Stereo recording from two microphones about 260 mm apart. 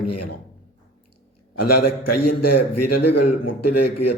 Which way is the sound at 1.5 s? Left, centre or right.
Left.